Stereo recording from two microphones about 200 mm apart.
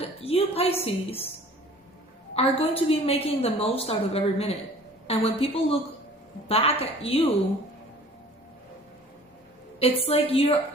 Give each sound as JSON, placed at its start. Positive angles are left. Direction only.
{"t": 0.0, "sound": "a woman's voice", "side_deg": 30}
{"t": 2.3, "sound": "a woman's voice", "side_deg": 30}
{"t": 9.8, "sound": "a woman's voice", "side_deg": 30}